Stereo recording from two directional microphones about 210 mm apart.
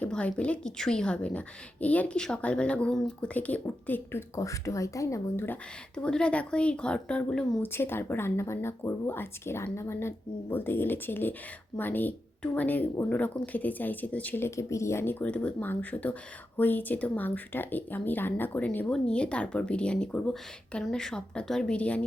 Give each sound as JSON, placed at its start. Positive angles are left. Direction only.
{"t": 0.0, "sound": "a woman's voice", "side_deg": 5}